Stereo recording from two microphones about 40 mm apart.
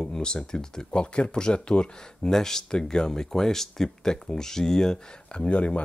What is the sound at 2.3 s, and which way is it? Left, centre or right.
Speech, centre.